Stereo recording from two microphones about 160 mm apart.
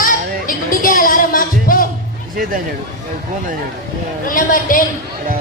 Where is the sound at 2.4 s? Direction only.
65° right (ahead or behind).